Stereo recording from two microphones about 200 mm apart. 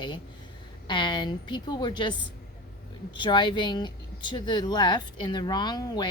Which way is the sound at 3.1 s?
25° left (ahead or behind).